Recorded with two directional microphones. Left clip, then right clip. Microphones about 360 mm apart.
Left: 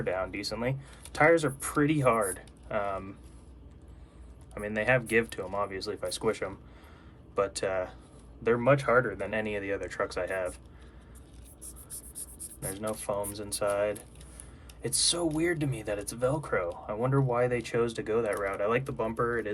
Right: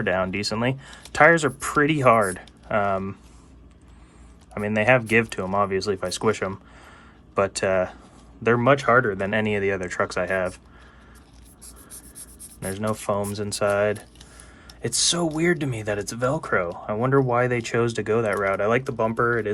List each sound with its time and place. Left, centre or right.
0.0 s speech: right
4.5 s speech: centre
12.6 s speech: right